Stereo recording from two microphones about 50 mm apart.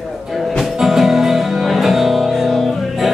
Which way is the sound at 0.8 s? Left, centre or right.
Centre.